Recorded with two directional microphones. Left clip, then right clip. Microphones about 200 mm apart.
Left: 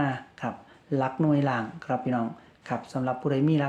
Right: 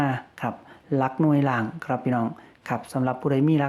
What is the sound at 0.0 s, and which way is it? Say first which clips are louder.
Speech: right 3 dB; 30° right (ahead or behind).